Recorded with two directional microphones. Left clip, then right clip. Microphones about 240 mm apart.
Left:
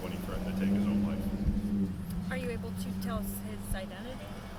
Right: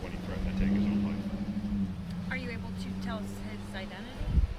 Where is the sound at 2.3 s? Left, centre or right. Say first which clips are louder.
Left 1 dB; left.